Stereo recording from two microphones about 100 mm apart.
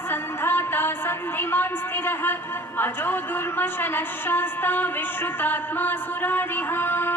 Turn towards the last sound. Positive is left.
turn(degrees=20)  # may be behind; listen again after turning